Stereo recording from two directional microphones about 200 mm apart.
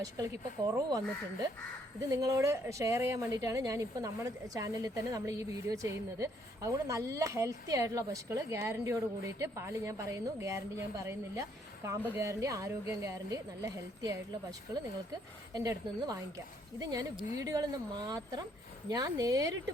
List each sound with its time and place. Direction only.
0.0 s a woman's voice: 15° right (ahead or behind)
15.5 s a woman's voice: 20° right (ahead or behind)